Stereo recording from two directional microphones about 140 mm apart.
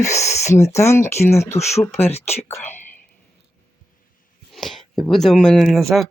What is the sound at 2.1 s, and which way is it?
Speech, 50° left (ahead or behind).